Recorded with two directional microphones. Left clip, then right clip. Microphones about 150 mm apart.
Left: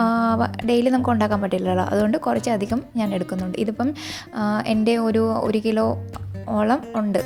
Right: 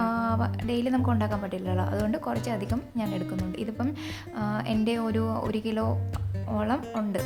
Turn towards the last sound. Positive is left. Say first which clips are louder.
# left 8 dB
turn(degrees=40)  # may be behind; listen again after turning